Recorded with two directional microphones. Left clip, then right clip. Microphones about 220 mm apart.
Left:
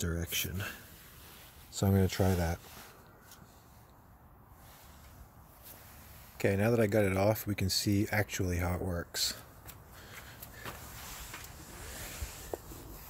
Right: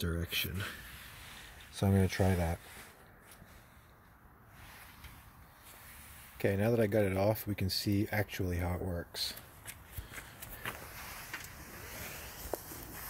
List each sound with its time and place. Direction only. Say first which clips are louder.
0.0 s speech: even; centre (ahead or behind)
6.3 s speech: left 2 dB; centre (ahead or behind)
12.5 s a sound: right 1 dB; 40° right (ahead or behind)